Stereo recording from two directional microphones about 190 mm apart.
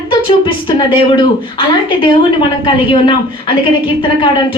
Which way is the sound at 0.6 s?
25° left (ahead or behind).